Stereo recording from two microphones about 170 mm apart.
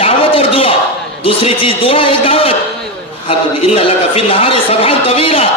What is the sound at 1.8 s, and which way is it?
A woman's voice, 35° left (ahead or behind).